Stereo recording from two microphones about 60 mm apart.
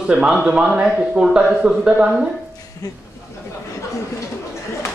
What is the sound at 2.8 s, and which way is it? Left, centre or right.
Speech, left.